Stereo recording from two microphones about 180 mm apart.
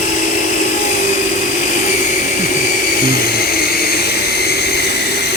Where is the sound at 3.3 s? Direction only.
60° left (ahead or behind).